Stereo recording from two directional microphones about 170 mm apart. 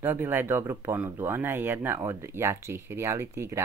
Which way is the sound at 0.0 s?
10° right (ahead or behind).